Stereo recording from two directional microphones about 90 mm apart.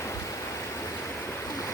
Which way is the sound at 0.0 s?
30° left (ahead or behind).